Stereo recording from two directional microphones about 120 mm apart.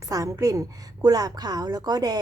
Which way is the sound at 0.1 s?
30° right (ahead or behind).